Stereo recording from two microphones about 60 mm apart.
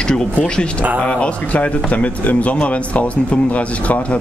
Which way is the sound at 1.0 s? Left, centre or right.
Left.